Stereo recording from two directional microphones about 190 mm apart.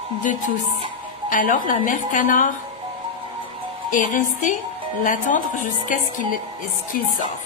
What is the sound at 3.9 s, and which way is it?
A woman's voice, 40° left (ahead or behind).